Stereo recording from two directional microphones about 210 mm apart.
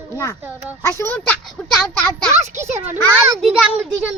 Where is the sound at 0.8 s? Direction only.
10° left (ahead or behind).